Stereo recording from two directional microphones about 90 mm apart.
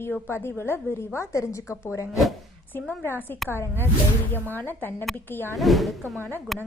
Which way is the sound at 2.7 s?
20° left (ahead or behind).